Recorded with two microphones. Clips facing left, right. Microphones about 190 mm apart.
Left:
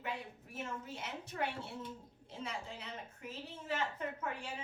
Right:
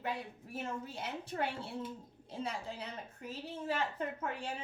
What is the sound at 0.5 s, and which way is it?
A woman's voice, 30° right (ahead or behind).